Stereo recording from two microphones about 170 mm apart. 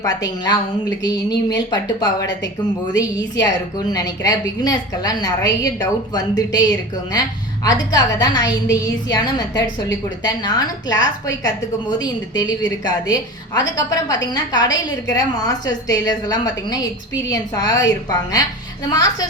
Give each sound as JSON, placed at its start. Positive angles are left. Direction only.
{"t": 0.0, "sound": "a woman's voice", "side_deg": 20}